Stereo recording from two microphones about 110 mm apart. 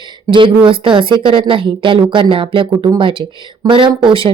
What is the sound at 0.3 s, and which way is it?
Speech, 50° right (ahead or behind).